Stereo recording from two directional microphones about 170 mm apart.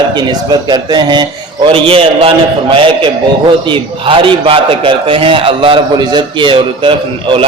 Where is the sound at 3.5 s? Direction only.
30° right (ahead or behind).